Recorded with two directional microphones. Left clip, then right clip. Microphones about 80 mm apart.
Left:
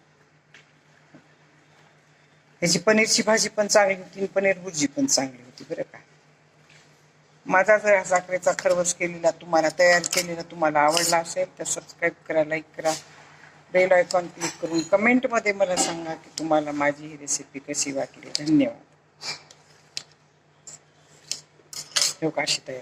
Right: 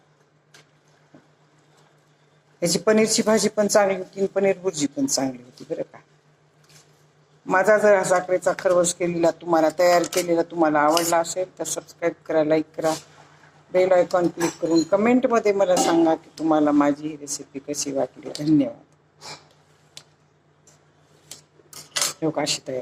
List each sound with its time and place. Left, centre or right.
2.6 s a woman's voice: right
7.4 s a woman's voice: right
19.2 s a sound: right
21.8 s cutlery: right